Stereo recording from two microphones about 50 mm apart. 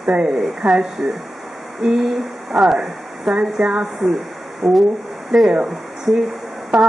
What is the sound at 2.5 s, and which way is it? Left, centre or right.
Speech, centre.